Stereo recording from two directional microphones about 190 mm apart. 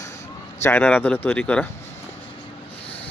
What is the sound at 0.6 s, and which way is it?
Speech, 10° left (ahead or behind).